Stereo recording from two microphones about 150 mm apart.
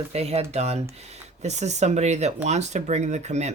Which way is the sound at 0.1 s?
45° right (ahead or behind).